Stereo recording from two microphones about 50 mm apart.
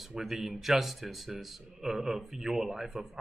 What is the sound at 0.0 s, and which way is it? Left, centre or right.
A man's voice, centre.